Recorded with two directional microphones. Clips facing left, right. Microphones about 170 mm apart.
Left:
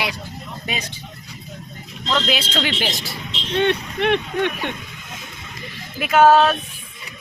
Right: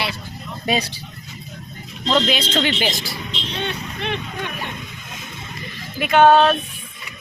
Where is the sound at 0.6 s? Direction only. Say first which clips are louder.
Right 9 dB; 35° right (ahead or behind).